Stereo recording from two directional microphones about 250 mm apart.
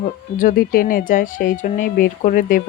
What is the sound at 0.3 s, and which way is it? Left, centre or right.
Speech, left.